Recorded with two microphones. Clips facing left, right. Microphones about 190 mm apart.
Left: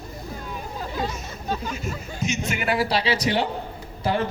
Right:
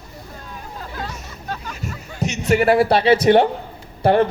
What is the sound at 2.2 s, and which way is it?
A man's voice, 60° right (ahead or behind).